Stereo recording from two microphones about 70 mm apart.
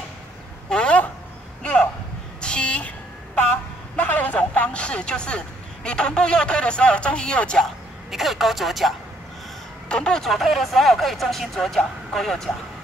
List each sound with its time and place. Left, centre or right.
0.7 s a sound: centre
3.9 s a sound: left
5.9 s speech: centre
8.1 s speech: centre
9.8 s speech: centre
10.3 s speech: centre